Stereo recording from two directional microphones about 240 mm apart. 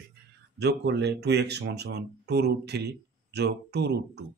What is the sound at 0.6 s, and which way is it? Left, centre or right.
Speech, right.